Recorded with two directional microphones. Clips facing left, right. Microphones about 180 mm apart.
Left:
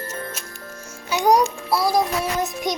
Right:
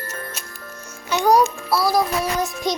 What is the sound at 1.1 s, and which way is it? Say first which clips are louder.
Music: right 1 dB; 15° left (ahead or behind).